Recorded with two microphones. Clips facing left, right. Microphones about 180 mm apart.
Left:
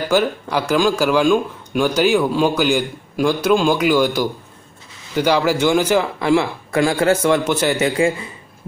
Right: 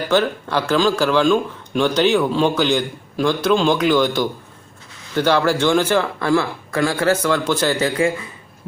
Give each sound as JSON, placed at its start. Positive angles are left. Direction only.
{"t": 0.1, "sound": "a man's voice", "side_deg": 10}